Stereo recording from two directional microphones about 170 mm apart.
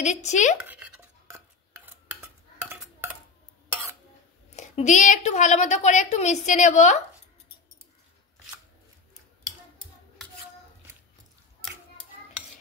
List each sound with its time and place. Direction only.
0.0 s a woman's voice: 45° left (ahead or behind)
0.7 s a sound: 10° right (ahead or behind)
2.2 s stir: 10° right (ahead or behind)
4.5 s a woman's voice: 40° left (ahead or behind)